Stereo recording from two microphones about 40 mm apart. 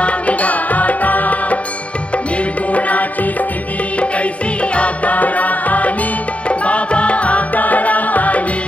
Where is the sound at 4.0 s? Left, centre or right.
Left.